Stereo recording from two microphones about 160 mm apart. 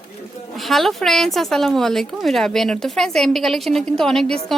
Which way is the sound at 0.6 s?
Centre (ahead or behind).